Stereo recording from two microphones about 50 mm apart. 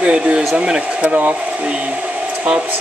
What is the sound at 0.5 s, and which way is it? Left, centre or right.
Speech, centre.